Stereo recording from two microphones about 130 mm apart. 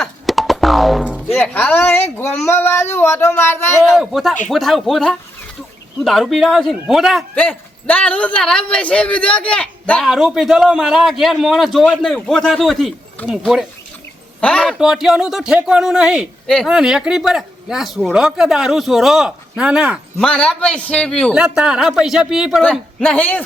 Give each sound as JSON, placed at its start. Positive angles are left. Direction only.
{"t": 0.0, "sound": "music", "side_deg": 0}
{"t": 1.3, "sound": "speech", "side_deg": 15}
{"t": 3.8, "sound": "speech", "side_deg": 0}
{"t": 7.3, "sound": "speech", "side_deg": 10}
{"t": 10.1, "sound": "speech", "side_deg": -5}
{"t": 20.1, "sound": "speech", "side_deg": 5}
{"t": 21.3, "sound": "speech", "side_deg": -5}
{"t": 22.7, "sound": "speech", "side_deg": 5}